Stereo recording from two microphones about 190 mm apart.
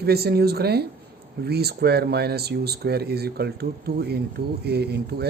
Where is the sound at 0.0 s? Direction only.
55° right (ahead or behind).